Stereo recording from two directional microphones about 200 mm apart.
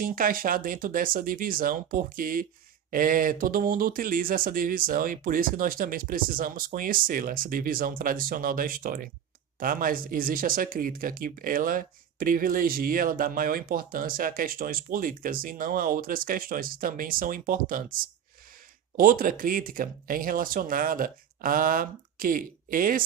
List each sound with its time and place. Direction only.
0.0 s speech: 45° right (ahead or behind)